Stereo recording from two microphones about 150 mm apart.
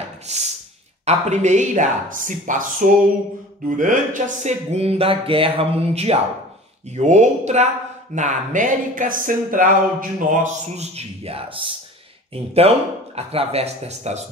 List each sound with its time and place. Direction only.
0.3 s speech: 50° right (ahead or behind)
3.7 s speech: 60° right (ahead or behind)